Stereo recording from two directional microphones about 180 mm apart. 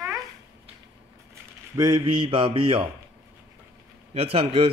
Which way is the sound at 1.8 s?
25° right (ahead or behind).